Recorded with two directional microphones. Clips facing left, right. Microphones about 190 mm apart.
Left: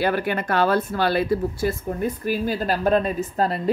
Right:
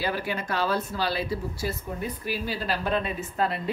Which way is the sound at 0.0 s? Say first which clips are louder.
Left 7 dB; 60° left (ahead or behind).